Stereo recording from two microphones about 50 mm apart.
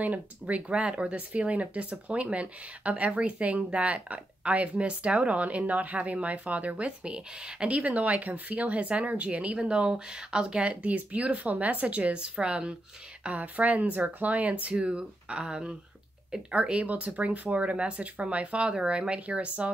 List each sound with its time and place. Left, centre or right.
0.0 s speech: right